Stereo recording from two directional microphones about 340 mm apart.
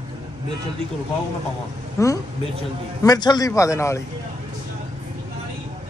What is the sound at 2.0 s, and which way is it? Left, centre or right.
A man's voice, centre.